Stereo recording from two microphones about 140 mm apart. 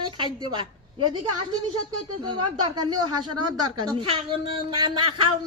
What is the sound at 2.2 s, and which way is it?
A woman's voice, 30° right (ahead or behind).